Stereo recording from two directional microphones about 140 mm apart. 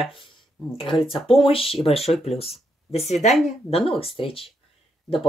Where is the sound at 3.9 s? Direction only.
40° left (ahead or behind).